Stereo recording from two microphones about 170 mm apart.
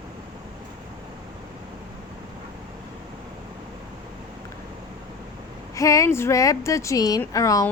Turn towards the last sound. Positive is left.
turn(degrees=20)  # may be behind; listen again after turning